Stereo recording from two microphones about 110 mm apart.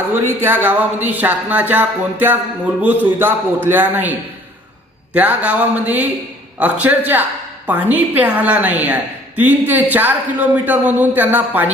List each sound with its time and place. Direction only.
0.1 s a woman's voice: 20° right (ahead or behind)
5.1 s a woman's voice: 15° right (ahead or behind)